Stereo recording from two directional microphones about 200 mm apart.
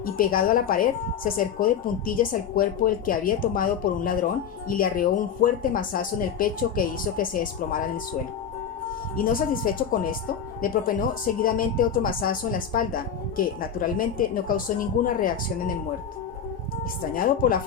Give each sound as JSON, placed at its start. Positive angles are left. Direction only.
{"t": 0.0, "sound": "a woman's voice", "side_deg": 45}
{"t": 9.1, "sound": "a woman's voice", "side_deg": 45}
{"t": 17.2, "sound": "a woman's voice", "side_deg": 45}